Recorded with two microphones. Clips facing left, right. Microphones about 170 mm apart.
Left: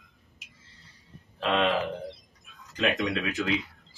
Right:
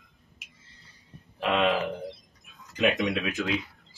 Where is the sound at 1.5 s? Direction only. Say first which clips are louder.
Right 1 dB; centre (ahead or behind).